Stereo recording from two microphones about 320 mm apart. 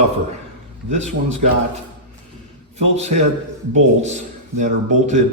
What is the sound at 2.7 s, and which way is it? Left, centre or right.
A man's voice, right.